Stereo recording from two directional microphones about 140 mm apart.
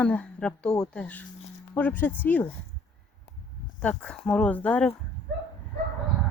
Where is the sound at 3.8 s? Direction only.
10° left (ahead or behind).